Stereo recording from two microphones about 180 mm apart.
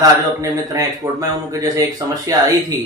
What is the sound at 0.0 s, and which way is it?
Speech, 20° right (ahead or behind).